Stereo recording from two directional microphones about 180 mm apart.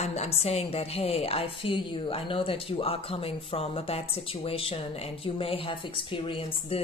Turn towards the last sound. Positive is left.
turn(degrees=35)  # may be behind; listen again after turning